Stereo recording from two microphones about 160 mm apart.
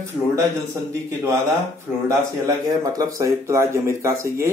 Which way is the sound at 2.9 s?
20° right (ahead or behind).